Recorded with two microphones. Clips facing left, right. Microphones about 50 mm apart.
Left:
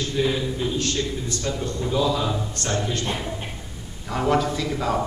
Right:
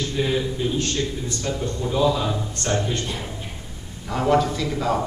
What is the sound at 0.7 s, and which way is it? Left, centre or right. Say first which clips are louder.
A man's voice: right 1 dB; right.